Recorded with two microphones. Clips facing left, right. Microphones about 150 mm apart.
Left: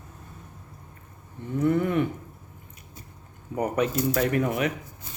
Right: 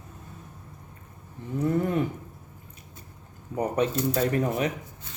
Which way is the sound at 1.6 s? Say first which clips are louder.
Left 2 dB; 35° right (ahead or behind).